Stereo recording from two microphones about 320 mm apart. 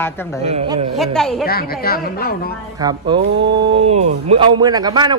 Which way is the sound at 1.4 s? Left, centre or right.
Left.